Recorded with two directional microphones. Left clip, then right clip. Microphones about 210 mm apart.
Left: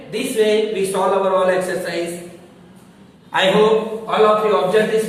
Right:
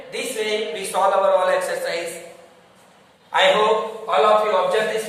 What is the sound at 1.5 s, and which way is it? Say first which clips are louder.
Speech: left 2 dB; 20° right (ahead or behind).